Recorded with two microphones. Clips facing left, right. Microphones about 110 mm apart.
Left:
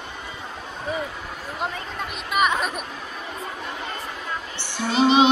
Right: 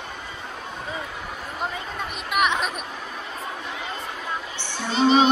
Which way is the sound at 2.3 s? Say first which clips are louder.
Left 1 dB; centre (ahead or behind).